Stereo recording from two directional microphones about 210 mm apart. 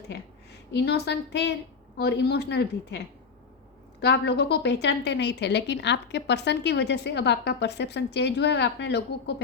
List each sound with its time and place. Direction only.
0.1 s a woman's voice: 55° left (ahead or behind)
4.0 s a woman's voice: 55° left (ahead or behind)